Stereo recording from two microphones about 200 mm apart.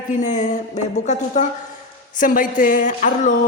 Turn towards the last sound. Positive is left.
turn(degrees=40)  # may be behind; listen again after turning